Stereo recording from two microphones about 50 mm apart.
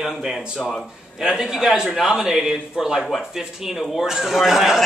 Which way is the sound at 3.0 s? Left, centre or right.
Centre.